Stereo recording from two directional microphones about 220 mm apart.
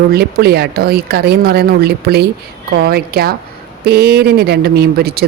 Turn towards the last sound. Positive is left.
turn(degrees=-45)  # may be behind; listen again after turning